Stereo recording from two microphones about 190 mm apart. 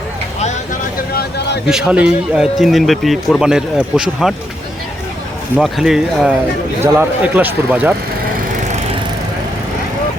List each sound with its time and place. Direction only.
1.1 s vehicle: 55° left (ahead or behind)
1.6 s speech: 5° right (ahead or behind)
5.5 s speech: centre (ahead or behind)